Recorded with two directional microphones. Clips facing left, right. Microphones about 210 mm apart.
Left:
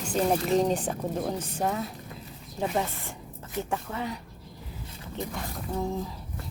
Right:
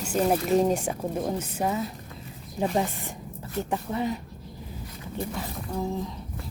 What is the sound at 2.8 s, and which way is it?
A woman's voice, 15° right (ahead or behind).